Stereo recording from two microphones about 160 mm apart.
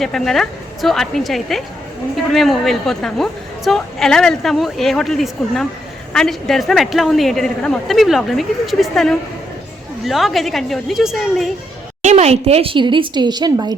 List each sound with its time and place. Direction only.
0.0 s a woman's voice: centre (ahead or behind)
12.0 s a woman's voice: 45° right (ahead or behind); by 13.7 s 25° right (ahead or behind)